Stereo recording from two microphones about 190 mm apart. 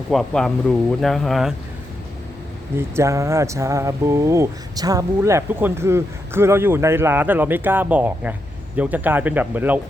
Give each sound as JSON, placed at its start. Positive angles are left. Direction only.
{"t": 0.1, "sound": "speech", "side_deg": 0}
{"t": 2.7, "sound": "speech", "side_deg": -15}